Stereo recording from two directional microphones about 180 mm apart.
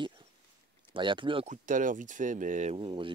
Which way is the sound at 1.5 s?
45° right (ahead or behind).